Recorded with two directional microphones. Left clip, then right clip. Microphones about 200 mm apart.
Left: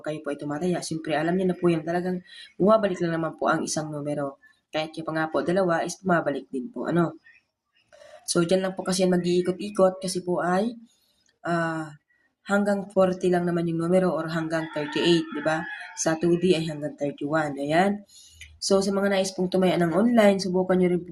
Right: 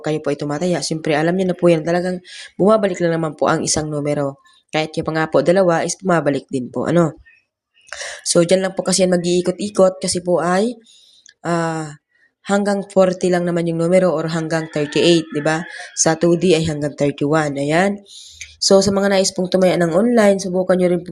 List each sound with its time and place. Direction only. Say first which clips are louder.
0.0 s speech: right 10 dB; 40° right (ahead or behind)